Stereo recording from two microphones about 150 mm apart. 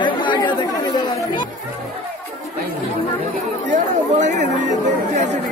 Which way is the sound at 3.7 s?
55° right (ahead or behind).